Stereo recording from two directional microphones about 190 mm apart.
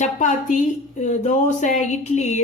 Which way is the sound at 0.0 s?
40° left (ahead or behind).